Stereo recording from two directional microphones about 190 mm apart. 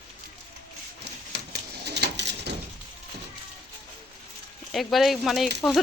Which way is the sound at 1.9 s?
60° right (ahead or behind).